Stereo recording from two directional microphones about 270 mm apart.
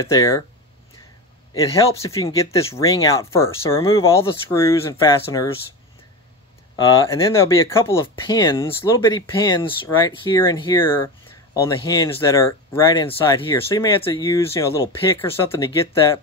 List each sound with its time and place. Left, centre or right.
0.0 s speech: centre
1.5 s speech: centre
6.9 s speech: centre